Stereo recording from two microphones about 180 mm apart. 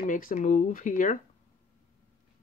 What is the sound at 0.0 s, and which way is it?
Speech, 45° left (ahead or behind).